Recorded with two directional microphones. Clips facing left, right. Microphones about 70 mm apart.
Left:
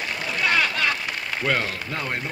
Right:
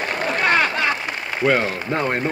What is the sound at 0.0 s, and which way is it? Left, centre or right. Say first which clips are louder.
Speech: right 5 dB; right.